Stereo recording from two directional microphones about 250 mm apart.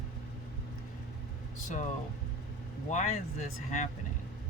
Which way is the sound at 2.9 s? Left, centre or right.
Left.